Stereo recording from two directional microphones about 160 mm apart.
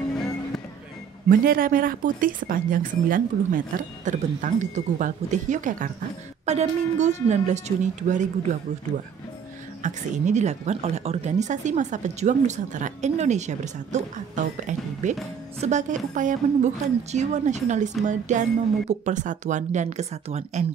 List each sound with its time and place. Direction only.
1.3 s speech: 65° right (ahead or behind)
6.4 s a woman's voice: 40° right (ahead or behind)
9.8 s a woman's voice: 50° right (ahead or behind)